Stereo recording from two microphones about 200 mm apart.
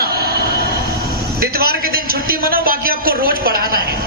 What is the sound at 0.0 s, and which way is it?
Vehicle, 50° right (ahead or behind).